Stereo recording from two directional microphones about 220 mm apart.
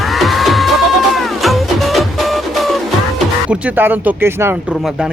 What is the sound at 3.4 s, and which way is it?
Speech, 5° right (ahead or behind).